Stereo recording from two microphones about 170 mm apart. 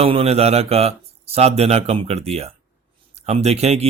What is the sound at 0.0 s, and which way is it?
A man's voice, 35° right (ahead or behind).